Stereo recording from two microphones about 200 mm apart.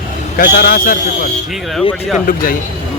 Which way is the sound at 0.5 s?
50° left (ahead or behind).